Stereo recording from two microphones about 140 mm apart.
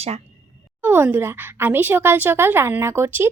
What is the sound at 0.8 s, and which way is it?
Speech, 15° right (ahead or behind).